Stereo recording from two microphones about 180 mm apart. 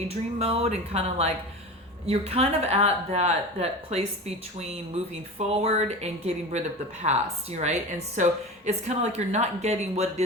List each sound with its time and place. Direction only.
0.3 s speech: 35° right (ahead or behind)
5.4 s speech: 35° right (ahead or behind)